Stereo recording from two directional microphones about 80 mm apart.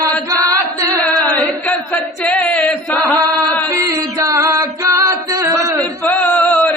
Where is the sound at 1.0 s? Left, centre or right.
Centre.